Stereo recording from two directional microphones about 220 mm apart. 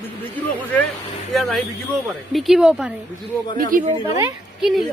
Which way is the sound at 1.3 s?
Centre (ahead or behind).